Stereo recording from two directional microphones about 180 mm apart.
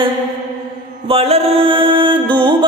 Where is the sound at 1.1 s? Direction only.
35° right (ahead or behind).